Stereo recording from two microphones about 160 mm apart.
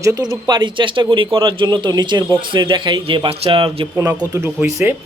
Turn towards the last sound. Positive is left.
turn(degrees=-10)  # may be behind; listen again after turning